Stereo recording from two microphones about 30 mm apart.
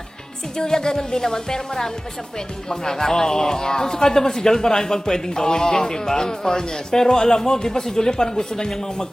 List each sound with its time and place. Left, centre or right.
0.7 s a man's voice: left